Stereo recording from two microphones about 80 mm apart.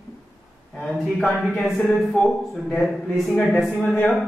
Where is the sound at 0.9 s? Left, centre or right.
Centre.